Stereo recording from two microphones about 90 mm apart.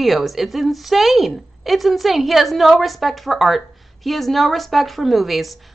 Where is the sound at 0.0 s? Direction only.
Centre (ahead or behind).